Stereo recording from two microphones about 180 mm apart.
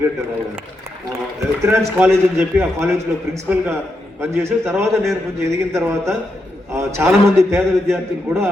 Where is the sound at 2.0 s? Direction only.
15° right (ahead or behind).